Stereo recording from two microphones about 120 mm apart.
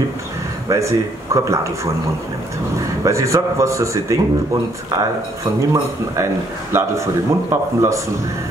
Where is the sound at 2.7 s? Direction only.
25° right (ahead or behind).